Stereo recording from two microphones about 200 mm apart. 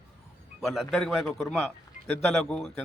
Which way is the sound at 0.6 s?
Centre (ahead or behind).